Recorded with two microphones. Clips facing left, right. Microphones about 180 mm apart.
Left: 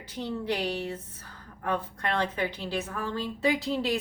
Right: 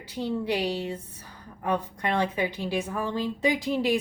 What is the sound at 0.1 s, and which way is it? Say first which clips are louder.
A woman's voice: right 3 dB; 10° right (ahead or behind).